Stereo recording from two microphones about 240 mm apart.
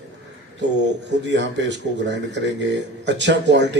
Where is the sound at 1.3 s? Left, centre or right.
Right.